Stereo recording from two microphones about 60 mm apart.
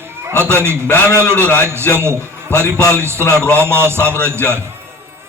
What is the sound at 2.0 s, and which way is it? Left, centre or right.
A man's voice, right.